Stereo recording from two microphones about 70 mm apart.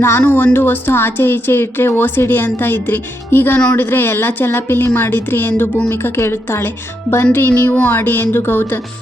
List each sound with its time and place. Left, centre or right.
0.2 s speech: left